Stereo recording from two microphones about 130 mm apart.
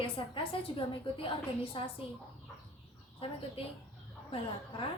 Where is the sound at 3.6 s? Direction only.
45° left (ahead or behind).